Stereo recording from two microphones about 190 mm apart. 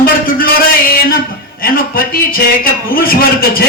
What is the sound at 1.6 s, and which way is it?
A man's voice, 50° left (ahead or behind).